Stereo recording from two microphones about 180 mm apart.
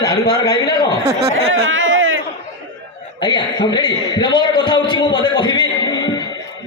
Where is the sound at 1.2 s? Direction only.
90° right.